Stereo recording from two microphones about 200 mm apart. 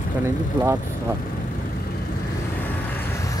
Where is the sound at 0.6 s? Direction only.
10° right (ahead or behind).